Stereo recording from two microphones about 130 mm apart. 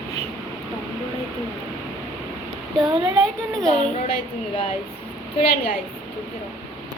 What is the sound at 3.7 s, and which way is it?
Speech, 50° left (ahead or behind).